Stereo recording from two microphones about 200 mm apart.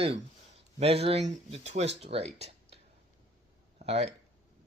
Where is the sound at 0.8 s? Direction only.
30° right (ahead or behind).